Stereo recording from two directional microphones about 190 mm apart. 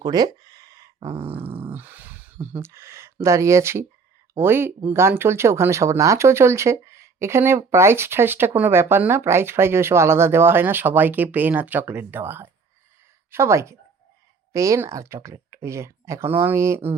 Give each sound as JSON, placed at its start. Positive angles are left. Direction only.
{"t": 0.0, "sound": "speech", "side_deg": -20}